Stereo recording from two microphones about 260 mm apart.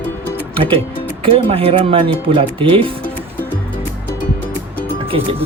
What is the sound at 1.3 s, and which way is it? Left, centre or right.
Speech, right.